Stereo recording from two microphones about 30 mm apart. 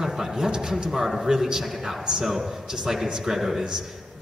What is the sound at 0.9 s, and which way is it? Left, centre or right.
A man's voice, centre.